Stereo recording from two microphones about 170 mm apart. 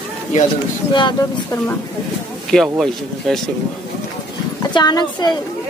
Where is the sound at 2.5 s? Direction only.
Centre (ahead or behind).